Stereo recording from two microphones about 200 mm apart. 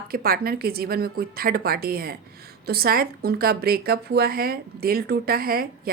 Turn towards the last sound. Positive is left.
turn(degrees=-50)  # may be behind; listen again after turning